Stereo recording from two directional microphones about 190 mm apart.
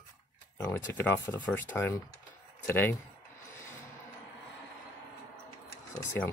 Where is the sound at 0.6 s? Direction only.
10° left (ahead or behind).